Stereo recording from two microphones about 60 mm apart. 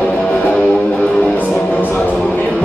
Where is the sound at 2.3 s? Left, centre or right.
Left.